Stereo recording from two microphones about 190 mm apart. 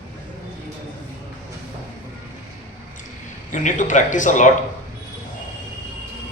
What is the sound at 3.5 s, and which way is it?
Speech, 40° left (ahead or behind).